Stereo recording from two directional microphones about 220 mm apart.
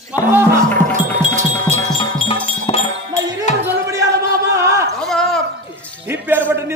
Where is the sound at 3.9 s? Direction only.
15° right (ahead or behind).